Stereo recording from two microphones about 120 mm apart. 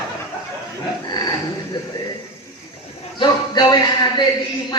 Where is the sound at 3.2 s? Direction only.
35° left (ahead or behind).